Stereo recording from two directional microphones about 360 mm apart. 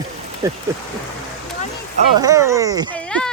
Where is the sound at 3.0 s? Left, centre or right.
Centre.